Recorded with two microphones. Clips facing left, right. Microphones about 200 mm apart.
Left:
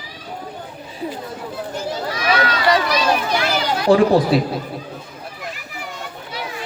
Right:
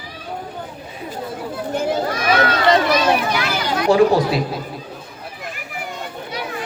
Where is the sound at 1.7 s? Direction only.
55° right (ahead or behind).